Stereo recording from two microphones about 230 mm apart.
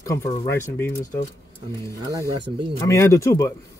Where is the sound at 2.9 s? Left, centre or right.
Centre.